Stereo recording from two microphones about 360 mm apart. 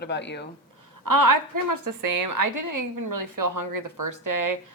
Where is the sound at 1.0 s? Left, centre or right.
Right.